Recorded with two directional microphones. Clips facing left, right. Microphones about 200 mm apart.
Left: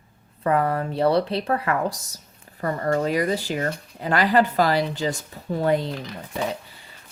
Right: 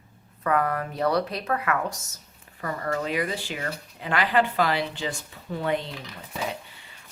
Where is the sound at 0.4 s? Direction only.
30° left (ahead or behind).